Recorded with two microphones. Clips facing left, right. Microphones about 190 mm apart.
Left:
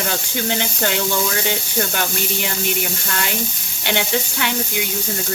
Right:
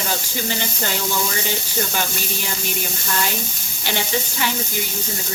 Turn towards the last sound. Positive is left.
turn(degrees=65)  # may be behind; listen again after turning